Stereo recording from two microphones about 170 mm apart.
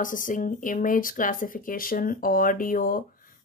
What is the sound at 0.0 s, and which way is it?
A woman's voice, 50° left (ahead or behind).